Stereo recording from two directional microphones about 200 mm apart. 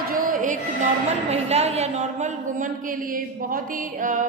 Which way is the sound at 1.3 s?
35° right (ahead or behind).